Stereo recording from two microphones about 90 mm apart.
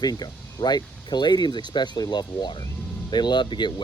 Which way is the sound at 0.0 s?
50° left (ahead or behind).